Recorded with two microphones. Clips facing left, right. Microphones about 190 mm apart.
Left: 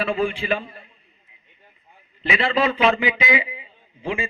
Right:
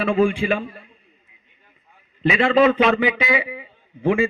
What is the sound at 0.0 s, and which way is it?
Speech, 50° right (ahead or behind).